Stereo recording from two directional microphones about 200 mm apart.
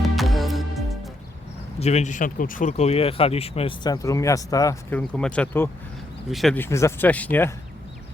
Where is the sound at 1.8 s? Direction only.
35° left (ahead or behind); by 7.5 s 10° left (ahead or behind).